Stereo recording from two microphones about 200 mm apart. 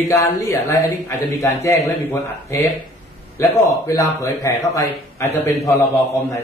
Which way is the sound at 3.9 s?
15° left (ahead or behind).